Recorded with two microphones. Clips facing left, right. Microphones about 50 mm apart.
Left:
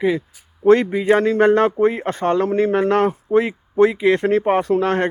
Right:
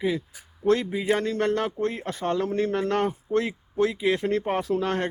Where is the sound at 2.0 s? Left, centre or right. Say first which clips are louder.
Left 8 dB; left.